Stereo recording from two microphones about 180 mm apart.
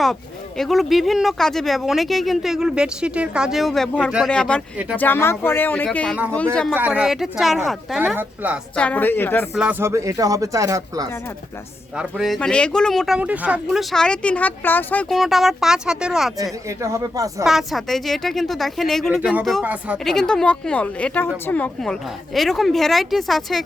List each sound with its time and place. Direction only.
0.0 s speech: centre (ahead or behind)
6.7 s speech: 10° right (ahead or behind)
8.1 s speech: 10° right (ahead or behind)
8.7 s speech: 5° left (ahead or behind)
9.6 s speech: 10° right (ahead or behind)
11.9 s speech: centre (ahead or behind)
15.1 s speech: centre (ahead or behind)
16.4 s speech: 15° right (ahead or behind)
17.4 s speech: centre (ahead or behind)
20.1 s speech: 5° left (ahead or behind)